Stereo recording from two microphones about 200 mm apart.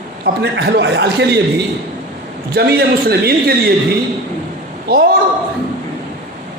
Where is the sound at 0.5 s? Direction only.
60° right (ahead or behind).